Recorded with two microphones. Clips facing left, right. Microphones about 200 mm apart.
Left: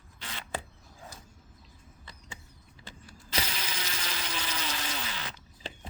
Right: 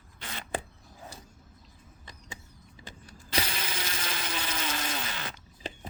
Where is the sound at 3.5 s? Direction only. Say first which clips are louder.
Right 2 dB; 55° right (ahead or behind).